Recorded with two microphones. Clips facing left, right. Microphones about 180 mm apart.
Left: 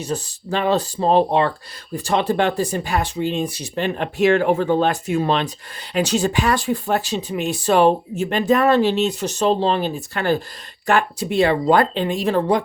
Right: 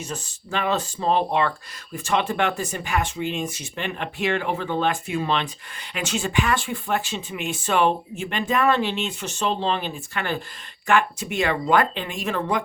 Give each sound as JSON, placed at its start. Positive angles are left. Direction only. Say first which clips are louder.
{"t": 0.0, "sound": "speech", "louder": "left 8 dB", "side_deg": 35}